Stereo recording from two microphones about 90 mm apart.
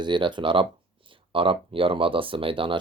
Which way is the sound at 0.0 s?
60° right (ahead or behind).